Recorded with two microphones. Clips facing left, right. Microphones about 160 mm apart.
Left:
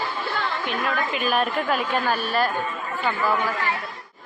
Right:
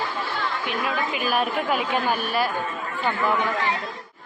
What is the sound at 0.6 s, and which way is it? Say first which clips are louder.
A woman's voice: even; 5° right (ahead or behind).